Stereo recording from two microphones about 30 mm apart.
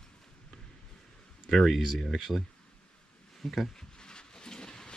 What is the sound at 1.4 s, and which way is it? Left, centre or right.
Speech, centre.